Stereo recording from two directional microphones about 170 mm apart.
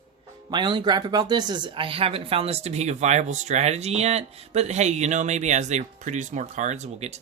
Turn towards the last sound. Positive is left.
turn(degrees=-40)  # may be behind; listen again after turning